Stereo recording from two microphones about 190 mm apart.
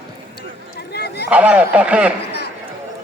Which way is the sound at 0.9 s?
60° left (ahead or behind).